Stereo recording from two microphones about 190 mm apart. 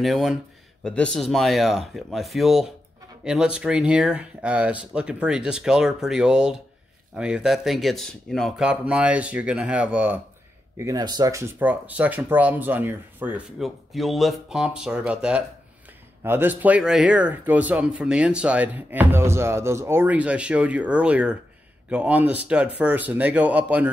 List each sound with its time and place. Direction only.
0.0 s speech: centre (ahead or behind)
10.8 s speech: 20° right (ahead or behind)